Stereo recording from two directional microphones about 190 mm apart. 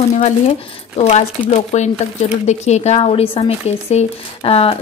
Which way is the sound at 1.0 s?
35° left (ahead or behind).